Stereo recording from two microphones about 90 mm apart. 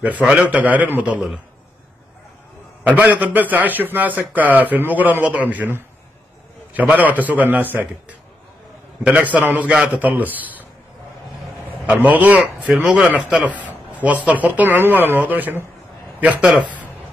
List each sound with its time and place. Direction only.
0.0 s speech: 15° right (ahead or behind)
3.0 s a man's voice: 20° right (ahead or behind)
6.7 s a sound: 15° right (ahead or behind)
7.1 s a man's voice: 20° right (ahead or behind)
11.9 s speech: 15° right (ahead or behind)